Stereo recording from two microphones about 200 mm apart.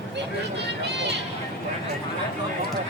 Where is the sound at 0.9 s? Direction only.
60° right (ahead or behind).